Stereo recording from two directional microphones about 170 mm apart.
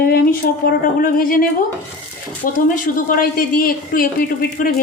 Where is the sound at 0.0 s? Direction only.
60° left (ahead or behind).